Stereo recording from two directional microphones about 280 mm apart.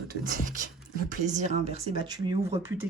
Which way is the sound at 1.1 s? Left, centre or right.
Right.